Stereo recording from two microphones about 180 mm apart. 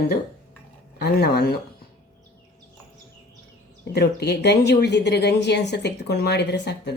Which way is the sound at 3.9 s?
65° left (ahead or behind).